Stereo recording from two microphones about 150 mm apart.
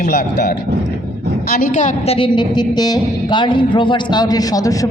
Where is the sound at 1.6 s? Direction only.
55° left (ahead or behind).